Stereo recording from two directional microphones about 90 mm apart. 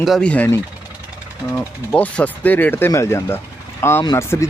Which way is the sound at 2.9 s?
30° left (ahead or behind).